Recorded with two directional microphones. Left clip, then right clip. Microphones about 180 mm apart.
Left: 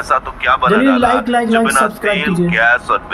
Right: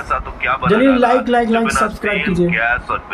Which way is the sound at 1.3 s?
5° left (ahead or behind).